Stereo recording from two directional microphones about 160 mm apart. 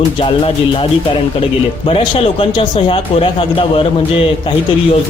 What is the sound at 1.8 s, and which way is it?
Speech, 35° left (ahead or behind).